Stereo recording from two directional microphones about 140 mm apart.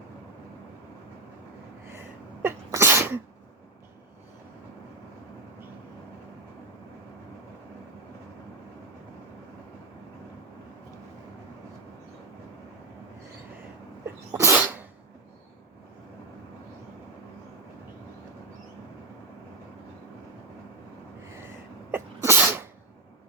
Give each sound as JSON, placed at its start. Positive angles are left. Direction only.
{"t": 1.9, "sound": "sneeze", "side_deg": -15}
{"t": 14.0, "sound": "sneeze", "side_deg": -20}
{"t": 21.2, "sound": "a sound", "side_deg": -20}
{"t": 21.9, "sound": "sneeze", "side_deg": -15}